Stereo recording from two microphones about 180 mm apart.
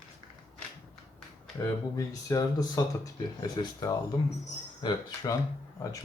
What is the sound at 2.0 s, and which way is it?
Speech, 20° left (ahead or behind).